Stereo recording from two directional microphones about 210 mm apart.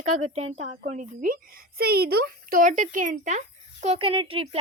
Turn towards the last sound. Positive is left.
turn(degrees=-25)  # may be behind; listen again after turning